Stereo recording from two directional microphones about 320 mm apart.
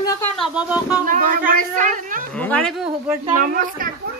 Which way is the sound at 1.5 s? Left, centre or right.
Right.